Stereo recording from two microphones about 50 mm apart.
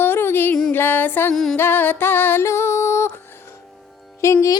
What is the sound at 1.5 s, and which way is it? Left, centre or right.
Music, left.